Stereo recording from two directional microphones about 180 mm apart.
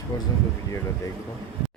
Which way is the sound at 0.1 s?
25° left (ahead or behind).